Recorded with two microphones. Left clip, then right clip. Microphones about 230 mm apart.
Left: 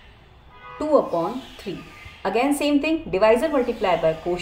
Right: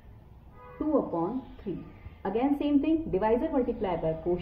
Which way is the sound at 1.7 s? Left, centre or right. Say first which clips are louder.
Left 5 dB; left.